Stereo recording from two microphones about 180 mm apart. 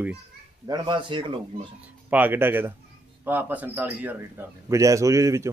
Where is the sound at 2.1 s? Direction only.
10° right (ahead or behind).